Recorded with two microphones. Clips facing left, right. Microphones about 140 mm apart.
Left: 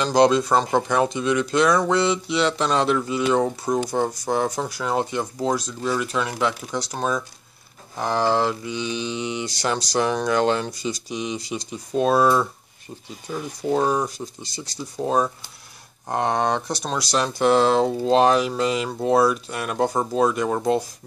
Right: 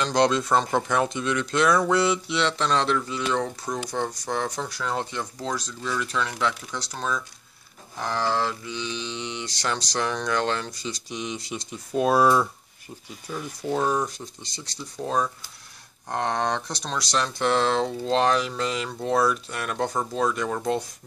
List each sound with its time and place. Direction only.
0.0 s speech: 5° left (ahead or behind)
3.6 s speech: 35° left (ahead or behind)
3.9 s speech: 10° left (ahead or behind); by 12.3 s 10° right (ahead or behind)
13.3 s speech: 10° left (ahead or behind)
14.0 s speech: 5° left (ahead or behind)
15.0 s speech: 20° left (ahead or behind)
19.9 s speech: 25° left (ahead or behind)
20.2 s speech: 10° left (ahead or behind)